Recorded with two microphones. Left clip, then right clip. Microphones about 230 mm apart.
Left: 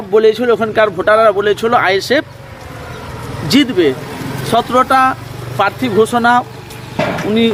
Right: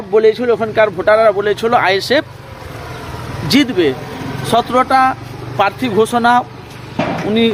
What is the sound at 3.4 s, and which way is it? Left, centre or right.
Speech, centre.